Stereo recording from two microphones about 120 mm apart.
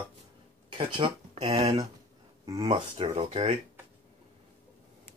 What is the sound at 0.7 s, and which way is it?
Speech, 45° right (ahead or behind).